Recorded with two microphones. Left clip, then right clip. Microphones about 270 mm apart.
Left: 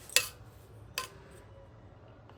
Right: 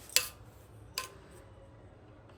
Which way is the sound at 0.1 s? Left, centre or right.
Centre.